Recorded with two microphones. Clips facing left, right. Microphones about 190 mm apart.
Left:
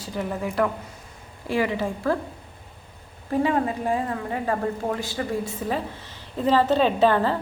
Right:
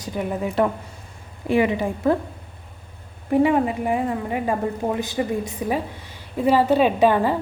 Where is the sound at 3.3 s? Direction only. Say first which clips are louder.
Right 4 dB; 15° right (ahead or behind).